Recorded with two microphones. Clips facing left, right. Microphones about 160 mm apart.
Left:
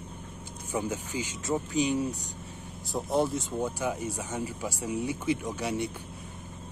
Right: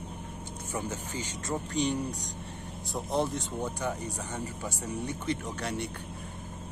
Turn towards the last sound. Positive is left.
turn(degrees=5)  # may be behind; listen again after turning